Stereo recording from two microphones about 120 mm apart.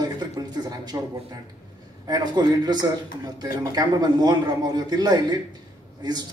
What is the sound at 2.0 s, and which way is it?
Speech, 35° right (ahead or behind).